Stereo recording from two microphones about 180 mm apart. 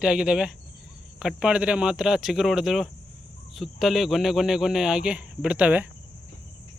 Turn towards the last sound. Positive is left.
turn(degrees=-5)  # may be behind; listen again after turning